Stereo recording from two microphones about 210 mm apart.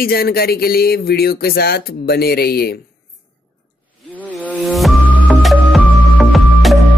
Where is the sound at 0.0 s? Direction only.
45° left (ahead or behind).